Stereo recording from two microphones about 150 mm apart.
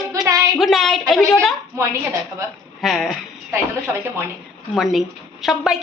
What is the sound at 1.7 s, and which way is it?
Speech, 20° right (ahead or behind).